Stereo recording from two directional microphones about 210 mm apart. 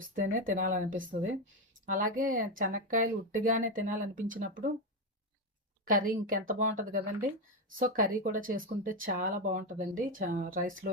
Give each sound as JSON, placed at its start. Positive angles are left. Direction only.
{"t": 0.1, "sound": "speech", "side_deg": -40}
{"t": 5.8, "sound": "speech", "side_deg": -40}